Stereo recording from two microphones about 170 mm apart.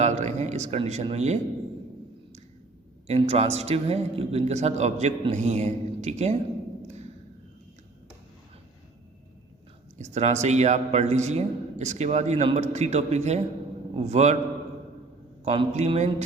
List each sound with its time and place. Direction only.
0.0 s a man's voice: 40° right (ahead or behind)
3.1 s a man's voice: 35° right (ahead or behind)
6.8 s a sound: 40° right (ahead or behind)
10.0 s a man's voice: 40° right (ahead or behind)
15.4 s a man's voice: 40° right (ahead or behind)